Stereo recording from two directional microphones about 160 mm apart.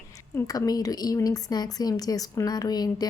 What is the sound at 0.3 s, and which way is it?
A woman's voice, 20° left (ahead or behind).